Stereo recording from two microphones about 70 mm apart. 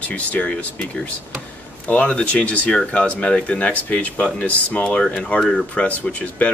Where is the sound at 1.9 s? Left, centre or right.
Centre.